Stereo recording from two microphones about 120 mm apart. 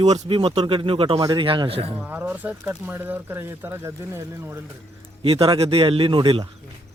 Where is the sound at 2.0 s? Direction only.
15° right (ahead or behind).